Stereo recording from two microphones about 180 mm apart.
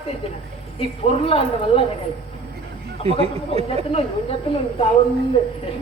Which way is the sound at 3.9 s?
30° left (ahead or behind).